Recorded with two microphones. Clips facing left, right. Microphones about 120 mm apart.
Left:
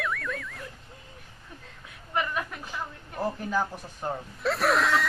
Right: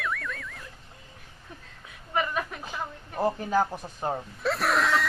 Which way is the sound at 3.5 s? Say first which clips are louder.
Right 4 dB; 35° right (ahead or behind).